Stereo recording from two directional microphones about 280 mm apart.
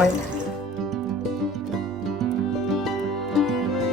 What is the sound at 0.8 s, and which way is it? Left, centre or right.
Music, centre.